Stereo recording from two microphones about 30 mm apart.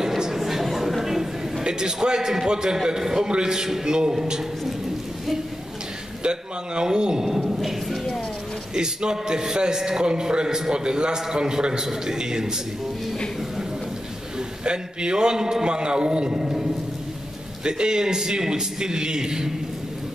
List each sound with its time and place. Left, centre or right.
0.0 s a sound: centre
1.6 s a man's voice: right
6.2 s a man's voice: right
7.2 s speech: centre
8.7 s a man's voice: right
14.6 s a man's voice: right
17.6 s a man's voice: right